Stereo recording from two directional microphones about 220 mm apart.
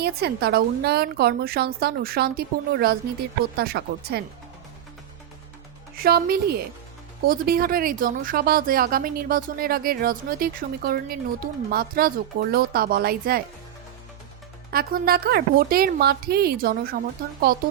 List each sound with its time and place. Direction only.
0.0 s a woman's voice: 45° right (ahead or behind)
6.0 s a woman's voice: 45° right (ahead or behind)
14.7 s a woman's voice: 45° right (ahead or behind)